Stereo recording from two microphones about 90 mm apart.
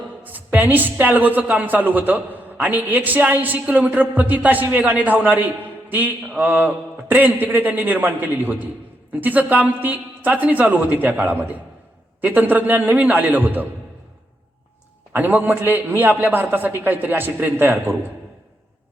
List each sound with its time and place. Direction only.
0.2 s a woman's voice: 20° right (ahead or behind)
15.1 s a woman's voice: 20° right (ahead or behind)